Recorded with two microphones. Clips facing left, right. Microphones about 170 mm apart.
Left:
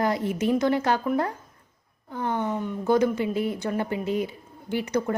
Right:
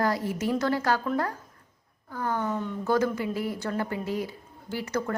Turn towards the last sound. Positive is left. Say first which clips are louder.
# left 4 dB
turn(degrees=20)  # may be behind; listen again after turning